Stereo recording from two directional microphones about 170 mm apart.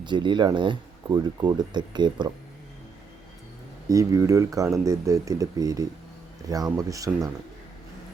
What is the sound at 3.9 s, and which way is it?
Speech, 20° right (ahead or behind).